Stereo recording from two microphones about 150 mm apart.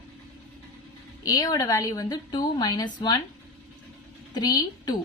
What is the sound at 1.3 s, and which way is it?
Speech, 25° left (ahead or behind).